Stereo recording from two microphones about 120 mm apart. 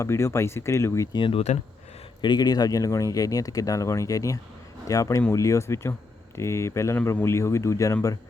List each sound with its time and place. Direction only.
0.0 s speech: 20° left (ahead or behind)
1.1 s speech: 45° left (ahead or behind)
2.2 s speech: 35° left (ahead or behind)